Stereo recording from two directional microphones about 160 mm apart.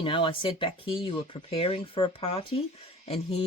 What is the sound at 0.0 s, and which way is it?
Speech, 35° left (ahead or behind).